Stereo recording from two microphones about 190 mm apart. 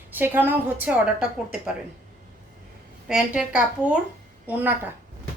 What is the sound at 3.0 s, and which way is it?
A woman's voice, 5° right (ahead or behind).